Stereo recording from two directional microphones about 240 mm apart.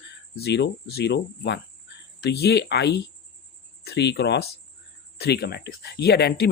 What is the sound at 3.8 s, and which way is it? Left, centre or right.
Speech, left.